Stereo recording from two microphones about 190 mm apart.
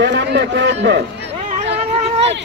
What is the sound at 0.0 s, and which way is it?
Run, 65° right (ahead or behind).